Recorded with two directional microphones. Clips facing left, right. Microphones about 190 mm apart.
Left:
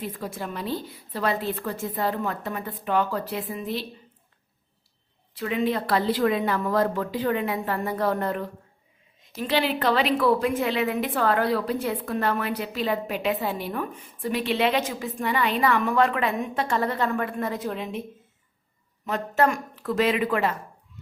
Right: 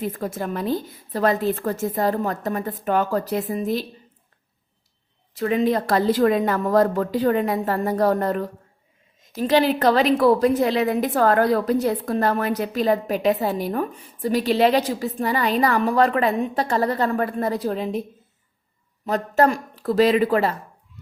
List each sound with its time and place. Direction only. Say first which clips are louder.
0.0 s a woman's voice: right 6 dB; 50° right (ahead or behind)
5.3 s a woman's voice: right 5 dB; 45° right (ahead or behind)
19.0 s a woman's voice: right 4 dB; 40° right (ahead or behind)